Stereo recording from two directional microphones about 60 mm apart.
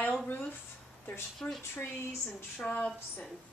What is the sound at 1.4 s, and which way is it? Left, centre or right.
Speech, centre.